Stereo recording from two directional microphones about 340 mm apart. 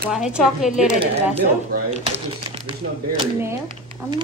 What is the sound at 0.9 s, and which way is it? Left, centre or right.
A woman's voice, centre.